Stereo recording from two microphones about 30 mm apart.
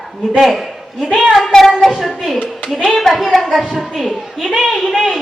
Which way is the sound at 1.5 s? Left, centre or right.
Centre.